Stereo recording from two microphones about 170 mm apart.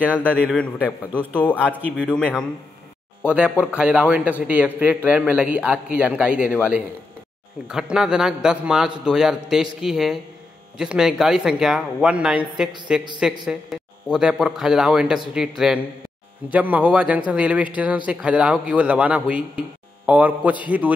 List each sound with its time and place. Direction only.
0.0 s a man's voice: 10° right (ahead or behind)
1.3 s speech: 10° left (ahead or behind)
3.3 s a man's voice: 5° right (ahead or behind)
7.6 s a man's voice: 5° right (ahead or behind)